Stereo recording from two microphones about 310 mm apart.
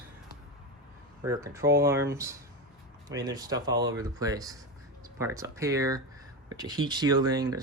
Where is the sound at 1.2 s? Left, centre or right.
Centre.